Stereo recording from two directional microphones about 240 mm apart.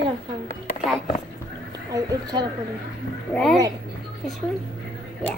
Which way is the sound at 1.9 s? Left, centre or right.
Centre.